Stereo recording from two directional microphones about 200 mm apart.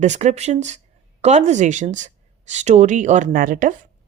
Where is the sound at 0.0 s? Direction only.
35° right (ahead or behind).